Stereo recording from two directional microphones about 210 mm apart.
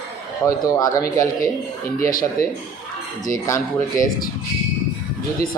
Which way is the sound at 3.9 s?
40° left (ahead or behind).